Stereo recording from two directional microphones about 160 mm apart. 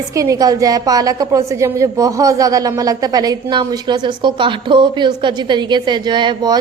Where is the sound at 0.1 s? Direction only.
20° right (ahead or behind).